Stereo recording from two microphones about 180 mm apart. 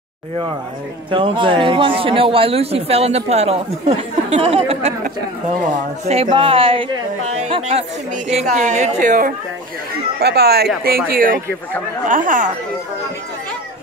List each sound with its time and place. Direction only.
1.1 s a man's voice: 30° right (ahead or behind)
6.0 s a man's voice: 35° right (ahead or behind)
10.2 s speech: 60° right (ahead or behind); by 12.5 s 45° right (ahead or behind)